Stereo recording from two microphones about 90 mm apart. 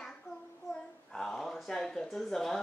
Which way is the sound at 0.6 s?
40° left (ahead or behind).